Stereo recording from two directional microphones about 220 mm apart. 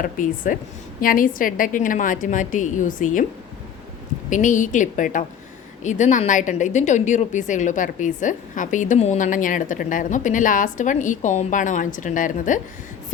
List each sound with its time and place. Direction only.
0.0 s a woman's voice: 40° left (ahead or behind)
4.3 s a woman's voice: 35° left (ahead or behind)